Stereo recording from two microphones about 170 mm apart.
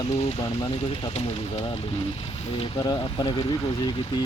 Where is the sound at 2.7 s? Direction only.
20° left (ahead or behind).